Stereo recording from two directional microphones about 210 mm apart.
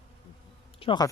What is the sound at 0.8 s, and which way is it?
Speech, 20° left (ahead or behind).